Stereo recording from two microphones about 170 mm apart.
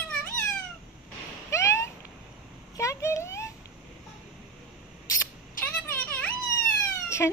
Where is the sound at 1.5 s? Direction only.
15° left (ahead or behind).